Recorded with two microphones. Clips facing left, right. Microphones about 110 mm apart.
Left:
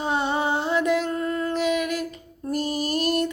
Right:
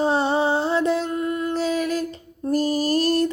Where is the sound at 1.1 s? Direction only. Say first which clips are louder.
Right 2 dB; 15° right (ahead or behind).